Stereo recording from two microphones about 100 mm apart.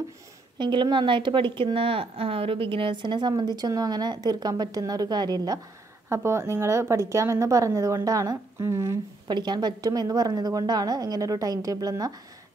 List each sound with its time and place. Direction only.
0.6 s a woman's voice: 50° right (ahead or behind)
6.0 s a woman's voice: 30° right (ahead or behind)
9.3 s a woman's voice: 45° right (ahead or behind)